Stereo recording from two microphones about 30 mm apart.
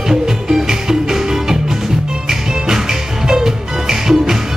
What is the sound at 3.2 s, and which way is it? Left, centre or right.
Music, centre.